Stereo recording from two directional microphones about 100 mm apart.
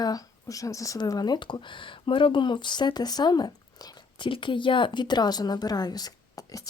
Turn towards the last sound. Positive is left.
turn(degrees=35)  # may be behind; listen again after turning